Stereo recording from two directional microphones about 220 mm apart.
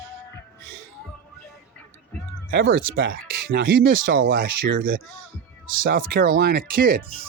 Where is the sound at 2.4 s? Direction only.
45° right (ahead or behind).